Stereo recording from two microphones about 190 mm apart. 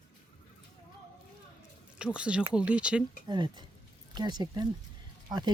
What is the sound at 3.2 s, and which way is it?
Speech, 25° right (ahead or behind).